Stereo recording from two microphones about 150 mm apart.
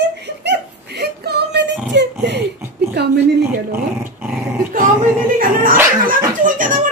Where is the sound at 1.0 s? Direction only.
90° right.